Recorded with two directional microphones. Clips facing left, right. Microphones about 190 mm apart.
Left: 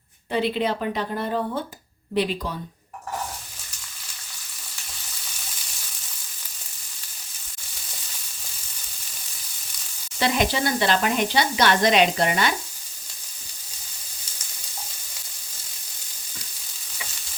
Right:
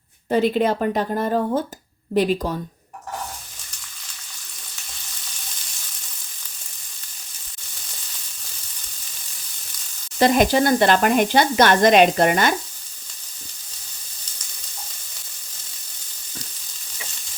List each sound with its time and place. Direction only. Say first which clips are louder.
0.3 s speech: right 5 dB; 45° right (ahead or behind)
10.2 s speech: right 7 dB; 45° right (ahead or behind)